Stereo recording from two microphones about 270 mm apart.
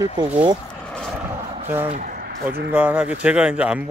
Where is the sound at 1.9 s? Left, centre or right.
Right.